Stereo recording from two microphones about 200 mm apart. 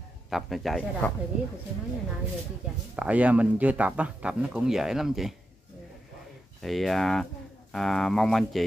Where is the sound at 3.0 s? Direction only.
5° right (ahead or behind).